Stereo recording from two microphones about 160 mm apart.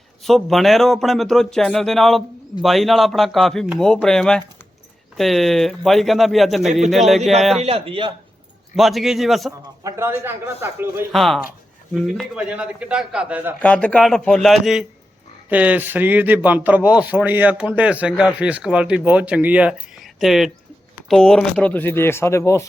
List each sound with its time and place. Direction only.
0.3 s speech: centre (ahead or behind)
7.6 s speech: 35° right (ahead or behind)
8.7 s speech: centre (ahead or behind)
9.8 s a man's voice: 15° right (ahead or behind)
11.1 s speech: centre (ahead or behind)
13.6 s a man's voice: 10° left (ahead or behind)